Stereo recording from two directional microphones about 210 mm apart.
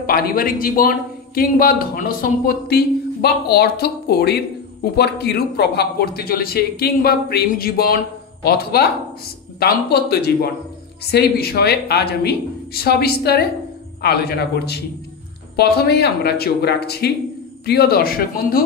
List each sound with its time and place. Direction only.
0.0 s a man's voice: 45° left (ahead or behind)